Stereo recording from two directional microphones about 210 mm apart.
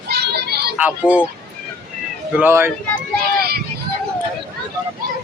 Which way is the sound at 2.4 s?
10° right (ahead or behind).